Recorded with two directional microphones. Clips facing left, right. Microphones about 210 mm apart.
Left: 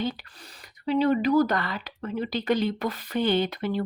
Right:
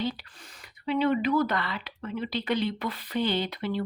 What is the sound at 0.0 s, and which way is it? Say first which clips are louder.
Speech: left 1 dB; 45° left (ahead or behind).